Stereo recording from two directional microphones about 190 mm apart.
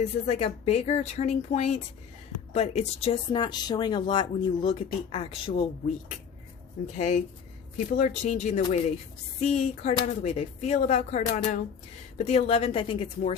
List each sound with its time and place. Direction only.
0.0 s speech: 35° left (ahead or behind)
6.9 s speech: 40° left (ahead or behind)